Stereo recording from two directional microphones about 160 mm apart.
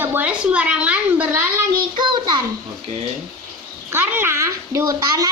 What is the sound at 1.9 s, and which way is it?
Speech, 30° right (ahead or behind).